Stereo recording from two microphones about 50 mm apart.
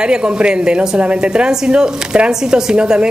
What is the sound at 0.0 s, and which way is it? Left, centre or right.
A woman's voice, centre.